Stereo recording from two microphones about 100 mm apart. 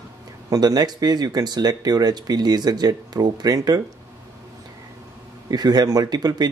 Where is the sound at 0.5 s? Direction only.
40° right (ahead or behind).